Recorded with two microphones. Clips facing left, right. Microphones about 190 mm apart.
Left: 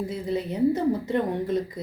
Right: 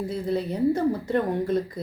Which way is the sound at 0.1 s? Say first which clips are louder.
Right 2 dB; 20° left (ahead or behind).